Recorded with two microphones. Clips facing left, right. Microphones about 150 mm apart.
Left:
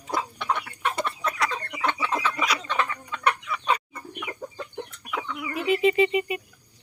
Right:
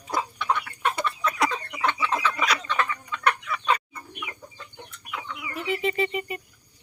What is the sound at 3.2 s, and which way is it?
Chicken, 10° left (ahead or behind).